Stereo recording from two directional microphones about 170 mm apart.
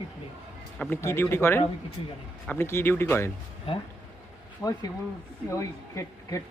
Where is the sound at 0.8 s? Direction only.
10° left (ahead or behind).